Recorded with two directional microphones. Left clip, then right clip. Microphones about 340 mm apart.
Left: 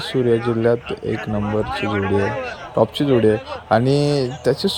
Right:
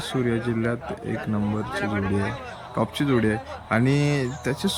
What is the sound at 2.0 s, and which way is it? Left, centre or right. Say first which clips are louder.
Speech: left 8 dB; left.